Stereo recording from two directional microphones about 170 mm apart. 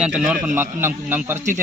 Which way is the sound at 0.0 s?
5° right (ahead or behind).